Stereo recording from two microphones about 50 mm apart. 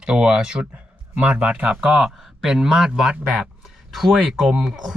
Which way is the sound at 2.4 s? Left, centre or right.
Centre.